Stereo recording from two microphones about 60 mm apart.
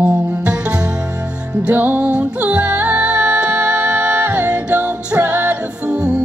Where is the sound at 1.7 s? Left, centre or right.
Right.